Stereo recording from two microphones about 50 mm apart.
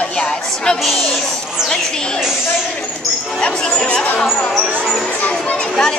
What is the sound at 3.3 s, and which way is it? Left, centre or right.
Chatter, centre.